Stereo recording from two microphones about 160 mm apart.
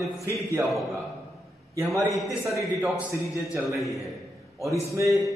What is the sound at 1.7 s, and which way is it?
Speech, 20° right (ahead or behind).